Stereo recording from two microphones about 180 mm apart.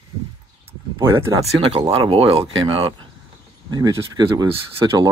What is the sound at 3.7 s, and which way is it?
Speech, 25° right (ahead or behind).